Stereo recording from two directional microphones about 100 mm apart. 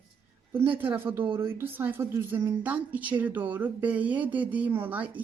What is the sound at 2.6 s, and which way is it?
Speech, 15° right (ahead or behind).